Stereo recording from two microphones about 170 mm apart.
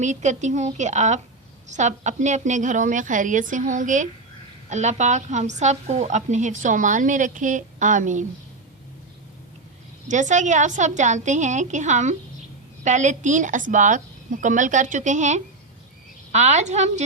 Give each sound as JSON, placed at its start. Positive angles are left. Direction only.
{"t": 0.0, "sound": "a woman's voice", "side_deg": -45}
{"t": 10.1, "sound": "a woman's voice", "side_deg": -45}